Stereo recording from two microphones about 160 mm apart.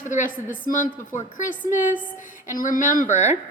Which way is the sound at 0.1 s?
55° left (ahead or behind).